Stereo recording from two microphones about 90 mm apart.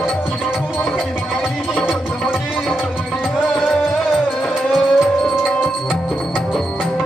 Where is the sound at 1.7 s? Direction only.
15° left (ahead or behind).